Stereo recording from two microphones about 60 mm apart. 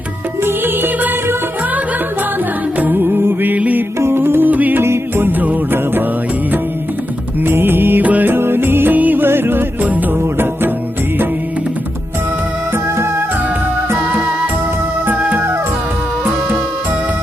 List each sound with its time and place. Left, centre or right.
0.4 s music: right
2.9 s music: right
4.0 s music: right
4.8 s music: right
7.4 s music: right
12.7 s music: right
14.0 s music: right